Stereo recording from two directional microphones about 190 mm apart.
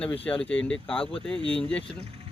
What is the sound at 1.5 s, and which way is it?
Speech, 5° left (ahead or behind).